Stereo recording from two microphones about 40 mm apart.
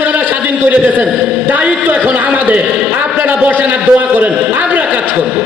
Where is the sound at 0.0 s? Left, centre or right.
Right.